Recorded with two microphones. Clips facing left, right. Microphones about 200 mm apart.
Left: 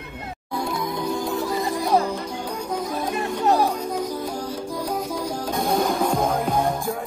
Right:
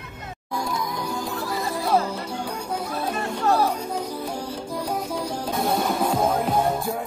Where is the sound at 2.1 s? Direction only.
10° right (ahead or behind).